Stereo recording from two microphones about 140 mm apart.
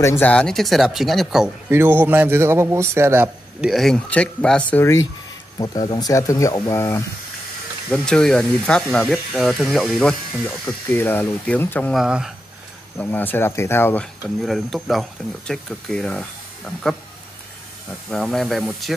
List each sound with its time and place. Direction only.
0.0 s speech: 15° left (ahead or behind); by 1.5 s centre (ahead or behind)
1.7 s a man's voice: 15° right (ahead or behind)
3.6 s speech: centre (ahead or behind)
5.6 s speech: 25° left (ahead or behind)
7.9 s speech: 5° left (ahead or behind)
11.9 s speech: 5° right (ahead or behind)
12.9 s speech: 15° left (ahead or behind)
14.4 s speech: centre (ahead or behind)
18.1 s speech: 5° left (ahead or behind)